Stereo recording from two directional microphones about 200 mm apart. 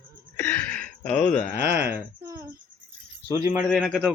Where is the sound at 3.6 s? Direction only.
Centre (ahead or behind).